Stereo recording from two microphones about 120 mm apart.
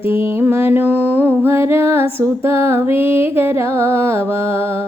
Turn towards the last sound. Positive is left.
turn(degrees=-20)  # may be behind; listen again after turning